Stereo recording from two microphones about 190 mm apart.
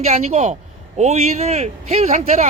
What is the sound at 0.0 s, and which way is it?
Speech, 35° right (ahead or behind).